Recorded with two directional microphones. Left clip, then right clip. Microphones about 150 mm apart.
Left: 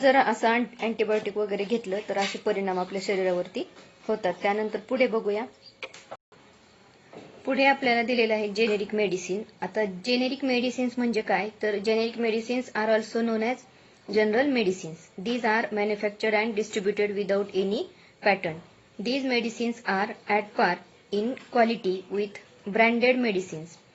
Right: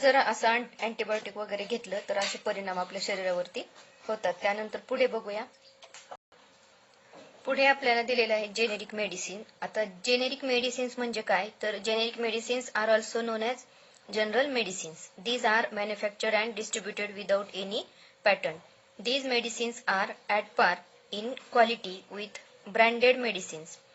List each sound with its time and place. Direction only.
0.0 s a woman's voice: 35° right (ahead or behind)
7.4 s a woman's voice: 35° right (ahead or behind)